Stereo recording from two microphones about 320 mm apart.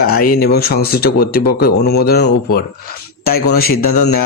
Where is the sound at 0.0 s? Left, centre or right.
Left.